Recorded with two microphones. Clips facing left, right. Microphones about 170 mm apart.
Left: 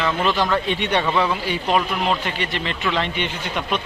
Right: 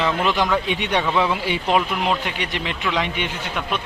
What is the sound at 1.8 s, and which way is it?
A man's voice, 10° right (ahead or behind).